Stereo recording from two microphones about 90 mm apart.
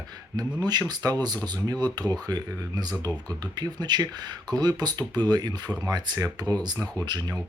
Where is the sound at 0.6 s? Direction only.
50° right (ahead or behind).